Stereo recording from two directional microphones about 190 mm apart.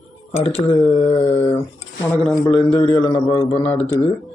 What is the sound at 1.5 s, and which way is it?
Speech, 15° left (ahead or behind).